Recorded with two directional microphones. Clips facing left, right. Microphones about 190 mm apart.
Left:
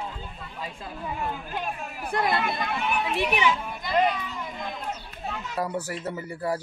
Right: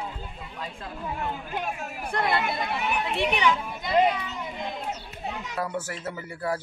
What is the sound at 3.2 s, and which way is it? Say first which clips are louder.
Speech: right 2 dB; 10° left (ahead or behind).